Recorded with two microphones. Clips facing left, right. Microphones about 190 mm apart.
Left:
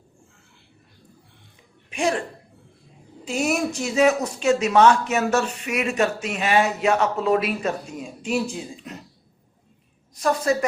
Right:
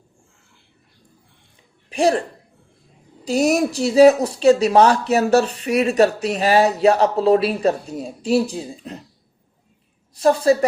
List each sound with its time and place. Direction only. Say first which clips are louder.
1.9 s speech: right 6 dB; 35° right (ahead or behind)
3.2 s speech: right 6 dB; 35° right (ahead or behind)
10.2 s speech: right 6 dB; 30° right (ahead or behind)